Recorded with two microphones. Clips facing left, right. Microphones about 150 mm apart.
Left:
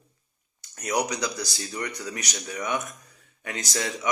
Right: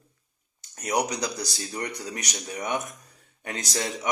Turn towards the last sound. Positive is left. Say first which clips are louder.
# even
turn(degrees=-30)  # may be behind; listen again after turning